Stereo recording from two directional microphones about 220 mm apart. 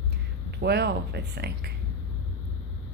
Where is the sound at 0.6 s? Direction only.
50° right (ahead or behind).